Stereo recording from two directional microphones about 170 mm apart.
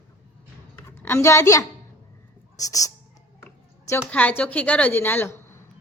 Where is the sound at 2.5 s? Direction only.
20° left (ahead or behind).